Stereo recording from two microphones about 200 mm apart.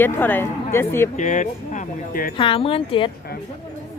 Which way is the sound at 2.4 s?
25° left (ahead or behind).